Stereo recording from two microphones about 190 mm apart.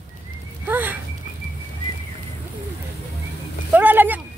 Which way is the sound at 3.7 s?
10° right (ahead or behind).